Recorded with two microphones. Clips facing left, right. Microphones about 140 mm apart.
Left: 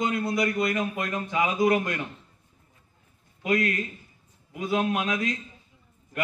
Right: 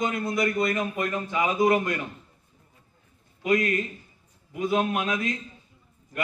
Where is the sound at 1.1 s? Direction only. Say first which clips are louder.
Even; 25° left (ahead or behind).